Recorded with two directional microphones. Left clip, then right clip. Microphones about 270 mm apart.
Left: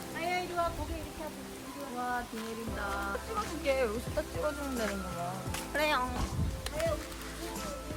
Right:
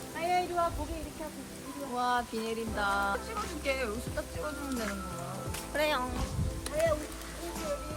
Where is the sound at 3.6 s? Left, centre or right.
Left.